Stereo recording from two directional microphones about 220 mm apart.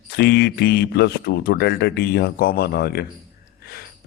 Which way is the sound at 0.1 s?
50° left (ahead or behind).